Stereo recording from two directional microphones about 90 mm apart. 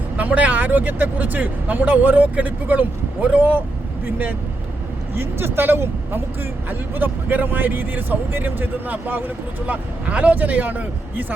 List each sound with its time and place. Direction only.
0.2 s speech: 20° right (ahead or behind)